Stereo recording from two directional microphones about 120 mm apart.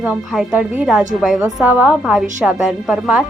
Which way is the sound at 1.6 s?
15° right (ahead or behind).